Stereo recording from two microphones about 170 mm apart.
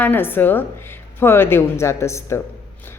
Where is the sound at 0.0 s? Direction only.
10° left (ahead or behind).